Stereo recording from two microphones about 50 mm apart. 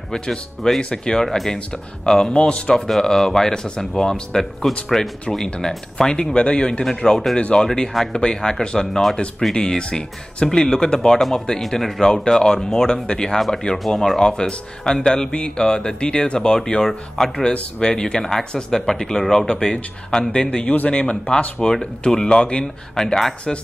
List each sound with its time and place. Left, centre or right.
0.1 s speech: centre
2.9 s speech: centre
7.3 s speech: left
13.4 s speech: centre; by 19.8 s left
20.1 s speech: centre
20.7 s speech: left
23.0 s speech: centre